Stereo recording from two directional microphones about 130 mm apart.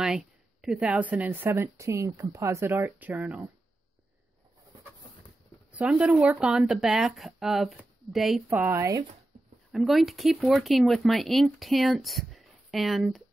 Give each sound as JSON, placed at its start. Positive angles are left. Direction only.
{"t": 0.0, "sound": "speech", "side_deg": -5}
{"t": 5.7, "sound": "speech", "side_deg": -10}
{"t": 8.5, "sound": "speech", "side_deg": -15}
{"t": 9.7, "sound": "speech", "side_deg": 0}